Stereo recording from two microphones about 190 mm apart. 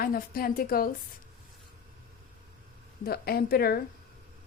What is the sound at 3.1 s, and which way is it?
Speech, 55° left (ahead or behind).